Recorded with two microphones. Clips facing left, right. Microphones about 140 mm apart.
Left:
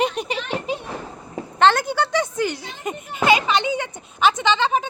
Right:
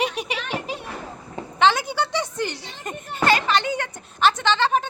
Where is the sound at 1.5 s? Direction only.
5° right (ahead or behind).